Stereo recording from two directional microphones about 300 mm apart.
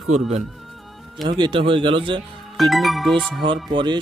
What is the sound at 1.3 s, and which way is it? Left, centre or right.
Speech, centre.